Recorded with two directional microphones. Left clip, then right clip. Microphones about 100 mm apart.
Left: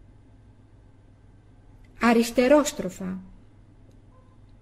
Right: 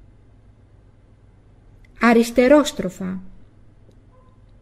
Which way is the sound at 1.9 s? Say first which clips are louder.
Right 6 dB; 30° right (ahead or behind).